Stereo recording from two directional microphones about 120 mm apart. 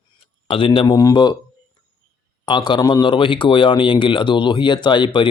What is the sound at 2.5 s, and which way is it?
Speech, 40° left (ahead or behind).